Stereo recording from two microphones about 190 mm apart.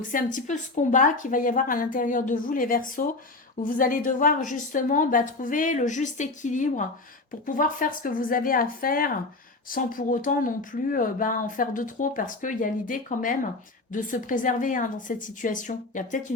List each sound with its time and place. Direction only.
0.1 s speech: 45° left (ahead or behind)